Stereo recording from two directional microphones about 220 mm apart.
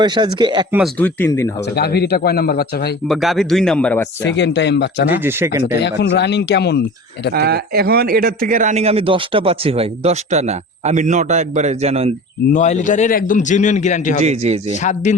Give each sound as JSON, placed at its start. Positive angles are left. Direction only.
{"t": 0.0, "sound": "speech", "side_deg": -20}
{"t": 0.9, "sound": "speech", "side_deg": 10}
{"t": 1.7, "sound": "speech", "side_deg": 45}
{"t": 3.1, "sound": "speech", "side_deg": 0}
{"t": 4.2, "sound": "speech", "side_deg": 55}
{"t": 5.2, "sound": "speech", "side_deg": -10}
{"t": 5.8, "sound": "speech", "side_deg": 50}
{"t": 7.3, "sound": "speech", "side_deg": -45}
{"t": 12.5, "sound": "a man's voice", "side_deg": 35}
{"t": 14.3, "sound": "speech", "side_deg": -30}